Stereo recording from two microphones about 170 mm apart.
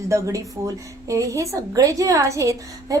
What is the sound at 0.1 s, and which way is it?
A woman's voice, 15° right (ahead or behind).